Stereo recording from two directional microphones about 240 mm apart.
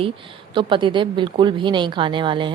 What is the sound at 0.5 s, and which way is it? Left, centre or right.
A woman's voice, centre.